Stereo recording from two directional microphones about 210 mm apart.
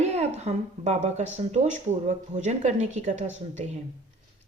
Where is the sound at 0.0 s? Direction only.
30° right (ahead or behind).